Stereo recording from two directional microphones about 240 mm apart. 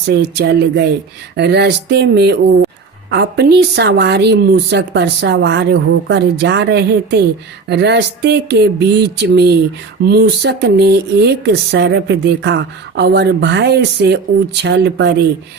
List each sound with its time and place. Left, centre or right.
0.0 s speech: right